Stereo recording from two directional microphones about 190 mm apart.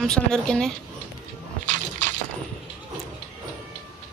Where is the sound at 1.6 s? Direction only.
40° right (ahead or behind).